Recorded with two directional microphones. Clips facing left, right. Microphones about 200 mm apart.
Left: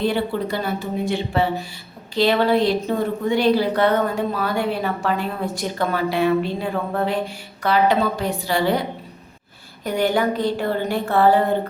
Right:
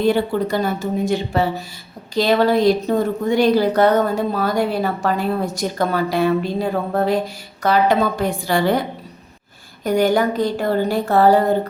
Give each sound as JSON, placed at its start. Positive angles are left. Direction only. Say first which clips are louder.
{"t": 0.0, "sound": "a woman's voice", "louder": "right 4 dB", "side_deg": -45}
{"t": 9.8, "sound": "a woman's voice", "louder": "right 4 dB", "side_deg": -45}